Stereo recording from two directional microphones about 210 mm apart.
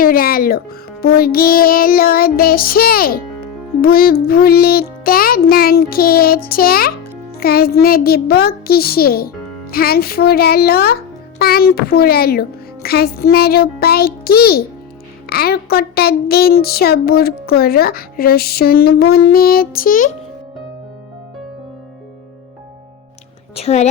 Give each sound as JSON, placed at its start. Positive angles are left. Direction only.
{"t": 0.0, "sound": "speech", "side_deg": 45}
{"t": 1.0, "sound": "a sound", "side_deg": 45}
{"t": 23.6, "sound": "a woman's voice", "side_deg": 30}